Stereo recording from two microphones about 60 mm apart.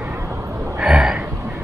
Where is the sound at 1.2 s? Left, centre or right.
Right.